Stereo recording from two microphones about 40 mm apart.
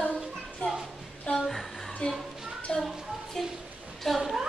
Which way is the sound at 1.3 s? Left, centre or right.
Centre.